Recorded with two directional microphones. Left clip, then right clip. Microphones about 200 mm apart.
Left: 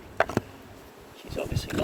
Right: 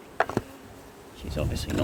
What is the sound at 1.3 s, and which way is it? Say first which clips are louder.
Speech: right 1 dB; 20° right (ahead or behind).